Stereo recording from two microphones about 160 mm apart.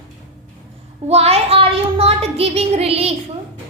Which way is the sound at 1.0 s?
40° right (ahead or behind).